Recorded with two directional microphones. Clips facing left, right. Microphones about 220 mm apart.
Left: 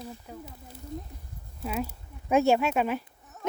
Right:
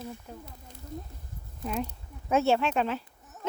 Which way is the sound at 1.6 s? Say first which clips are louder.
Left 1 dB; 5° left (ahead or behind).